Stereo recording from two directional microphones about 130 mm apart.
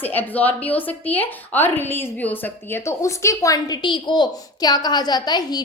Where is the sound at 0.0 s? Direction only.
15° left (ahead or behind).